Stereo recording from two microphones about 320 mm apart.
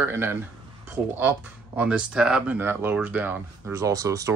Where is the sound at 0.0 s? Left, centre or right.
Centre.